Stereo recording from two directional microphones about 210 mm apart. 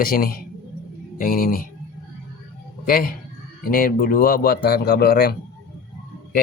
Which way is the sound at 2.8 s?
45° left (ahead or behind).